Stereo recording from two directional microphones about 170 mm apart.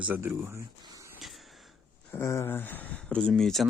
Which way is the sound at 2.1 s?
15° left (ahead or behind).